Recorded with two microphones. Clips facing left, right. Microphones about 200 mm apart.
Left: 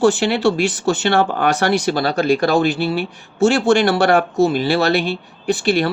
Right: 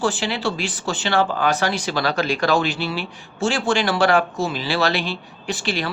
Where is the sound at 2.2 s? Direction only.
55° left (ahead or behind).